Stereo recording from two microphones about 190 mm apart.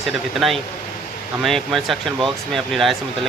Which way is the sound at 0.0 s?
Centre (ahead or behind).